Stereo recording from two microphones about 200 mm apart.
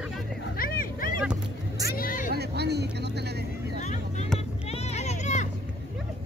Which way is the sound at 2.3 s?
55° right (ahead or behind).